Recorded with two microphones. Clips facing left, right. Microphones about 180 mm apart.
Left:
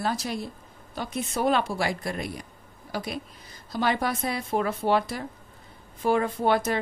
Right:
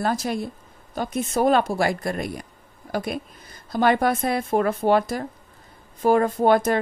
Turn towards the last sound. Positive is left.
turn(degrees=-45)  # may be behind; listen again after turning